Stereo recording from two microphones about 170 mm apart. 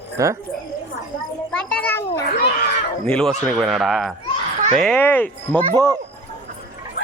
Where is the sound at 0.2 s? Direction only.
20° right (ahead or behind).